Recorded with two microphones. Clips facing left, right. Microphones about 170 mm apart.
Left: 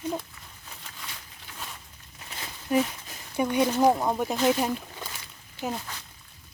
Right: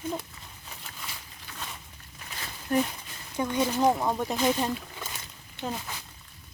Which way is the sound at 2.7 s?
5° left (ahead or behind).